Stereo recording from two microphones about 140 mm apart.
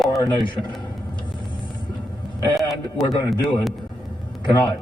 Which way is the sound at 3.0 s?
Centre (ahead or behind).